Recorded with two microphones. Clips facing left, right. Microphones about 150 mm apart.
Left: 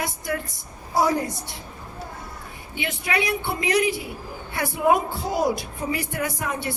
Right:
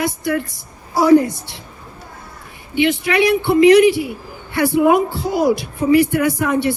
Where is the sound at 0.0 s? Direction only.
80° right.